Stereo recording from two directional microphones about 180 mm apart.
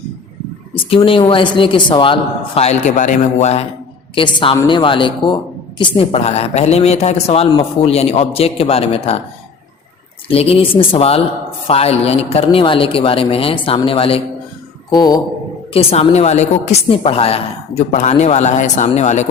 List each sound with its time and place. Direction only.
0.9 s speech: 30° left (ahead or behind)
2.6 s a woman's voice: 40° left (ahead or behind)
4.1 s a woman's voice: 25° left (ahead or behind)
10.2 s a woman's voice: 35° left (ahead or behind)
15.7 s a woman's voice: 35° left (ahead or behind)